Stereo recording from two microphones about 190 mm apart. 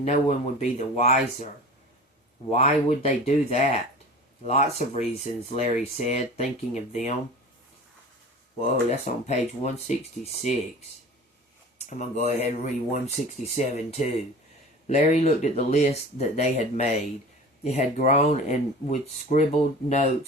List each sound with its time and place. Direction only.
0.0 s speech: 40° left (ahead or behind)
2.5 s speech: 35° left (ahead or behind)
8.5 s speech: 40° left (ahead or behind)
11.9 s speech: 40° left (ahead or behind)